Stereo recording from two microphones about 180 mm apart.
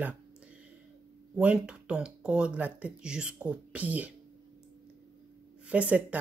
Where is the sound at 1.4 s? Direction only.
5° right (ahead or behind).